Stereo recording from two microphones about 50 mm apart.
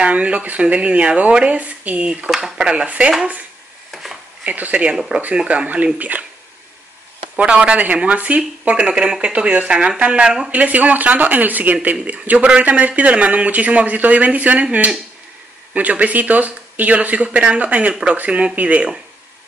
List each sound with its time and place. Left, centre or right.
0.0 s speech: right
2.2 s speech: centre
3.9 s a sound: centre
4.5 s speech: right
5.9 s speech: right
7.3 s speech: right
10.5 s speech: right